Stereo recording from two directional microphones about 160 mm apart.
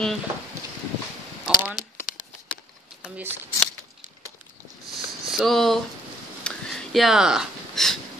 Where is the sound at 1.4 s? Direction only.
Centre (ahead or behind).